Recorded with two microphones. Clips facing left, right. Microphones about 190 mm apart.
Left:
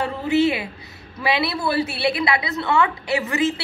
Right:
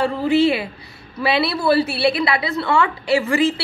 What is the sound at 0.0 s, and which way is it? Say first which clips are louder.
A woman's voice: right 3 dB; 20° left (ahead or behind).